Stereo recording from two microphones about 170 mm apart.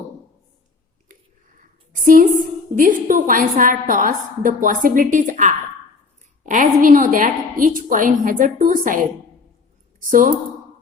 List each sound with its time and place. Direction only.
1.9 s a woman's voice: 55° right (ahead or behind)
6.4 s a sound: 50° right (ahead or behind)
6.8 s a woman's voice: 50° right (ahead or behind)